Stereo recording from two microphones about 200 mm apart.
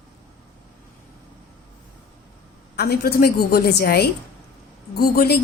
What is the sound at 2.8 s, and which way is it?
A woman's voice, 50° left (ahead or behind).